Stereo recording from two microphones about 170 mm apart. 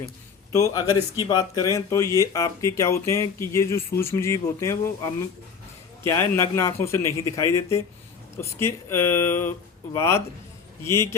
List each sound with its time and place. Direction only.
0.5 s a man's voice: 20° left (ahead or behind)